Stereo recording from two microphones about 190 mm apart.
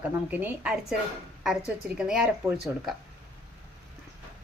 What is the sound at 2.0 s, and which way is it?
Speech, 5° right (ahead or behind).